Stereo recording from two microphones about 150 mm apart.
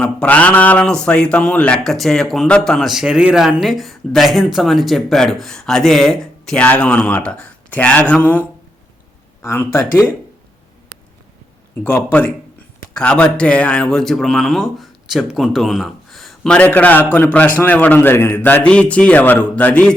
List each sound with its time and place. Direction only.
0.0 s speech: 10° left (ahead or behind)
11.8 s speech: 15° left (ahead or behind)